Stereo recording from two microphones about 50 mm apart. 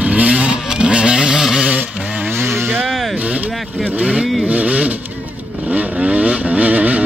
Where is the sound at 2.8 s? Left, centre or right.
Centre.